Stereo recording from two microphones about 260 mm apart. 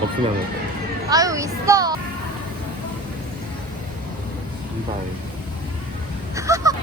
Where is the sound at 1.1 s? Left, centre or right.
Centre.